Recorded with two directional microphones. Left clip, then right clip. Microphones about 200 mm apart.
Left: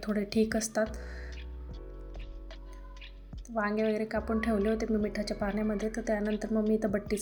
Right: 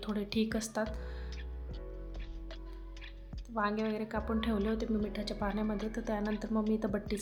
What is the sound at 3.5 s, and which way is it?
A woman's voice, 10° left (ahead or behind).